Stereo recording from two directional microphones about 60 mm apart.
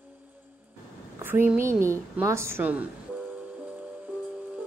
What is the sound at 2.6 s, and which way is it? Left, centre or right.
Speech, right.